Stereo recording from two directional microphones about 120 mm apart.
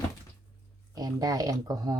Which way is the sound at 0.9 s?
30° right (ahead or behind).